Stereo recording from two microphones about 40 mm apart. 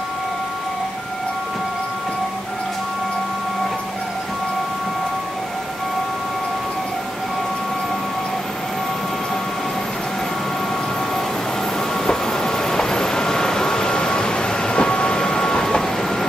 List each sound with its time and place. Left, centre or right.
12.1 s vehicle: centre